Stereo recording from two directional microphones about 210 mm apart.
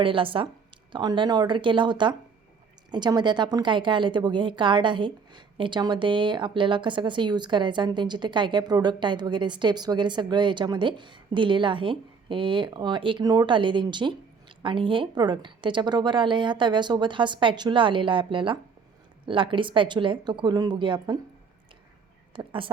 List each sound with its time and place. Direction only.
0.0 s a woman's voice: 25° right (ahead or behind)
22.3 s speech: 25° right (ahead or behind)